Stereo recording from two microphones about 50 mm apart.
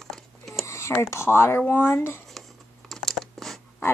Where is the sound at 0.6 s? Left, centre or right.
Left.